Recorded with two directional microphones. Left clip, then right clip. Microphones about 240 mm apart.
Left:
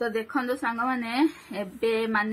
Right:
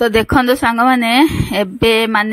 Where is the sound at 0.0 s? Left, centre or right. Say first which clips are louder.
Right 15 dB; right.